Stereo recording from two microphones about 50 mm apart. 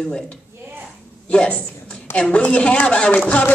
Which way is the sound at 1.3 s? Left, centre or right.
Left.